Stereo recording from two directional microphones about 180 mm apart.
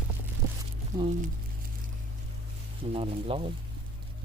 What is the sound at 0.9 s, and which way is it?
Speech, 20° right (ahead or behind).